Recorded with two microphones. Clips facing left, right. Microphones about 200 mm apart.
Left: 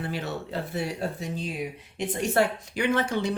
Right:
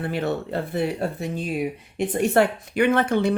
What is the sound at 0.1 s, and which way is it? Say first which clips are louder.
A woman's voice: right 6 dB; 55° right (ahead or behind).